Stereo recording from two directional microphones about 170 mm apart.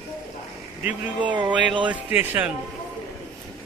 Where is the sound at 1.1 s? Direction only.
25° right (ahead or behind).